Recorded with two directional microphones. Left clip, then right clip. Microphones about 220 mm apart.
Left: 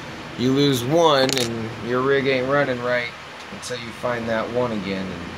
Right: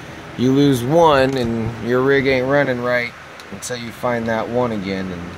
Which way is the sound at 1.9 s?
50° right (ahead or behind).